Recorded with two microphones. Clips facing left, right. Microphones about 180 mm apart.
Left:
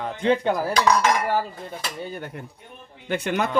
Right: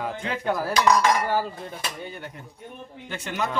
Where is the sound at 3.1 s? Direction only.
60° left (ahead or behind).